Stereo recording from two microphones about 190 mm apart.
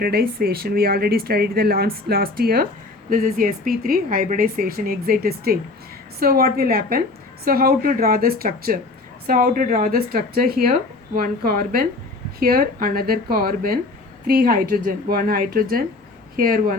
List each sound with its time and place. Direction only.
0.0 s speech: 55° right (ahead or behind)